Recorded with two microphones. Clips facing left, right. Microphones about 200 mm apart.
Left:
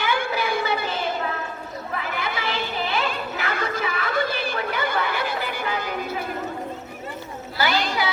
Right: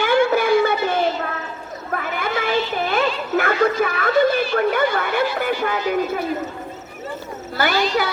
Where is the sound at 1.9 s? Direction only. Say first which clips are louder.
Right 6 dB; 50° right (ahead or behind).